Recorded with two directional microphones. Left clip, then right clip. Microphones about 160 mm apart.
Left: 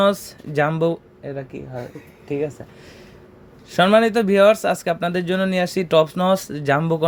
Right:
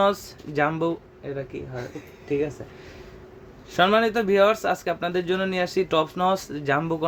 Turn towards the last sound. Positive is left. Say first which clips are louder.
# left 5 dB
turn(degrees=45)  # may be behind; listen again after turning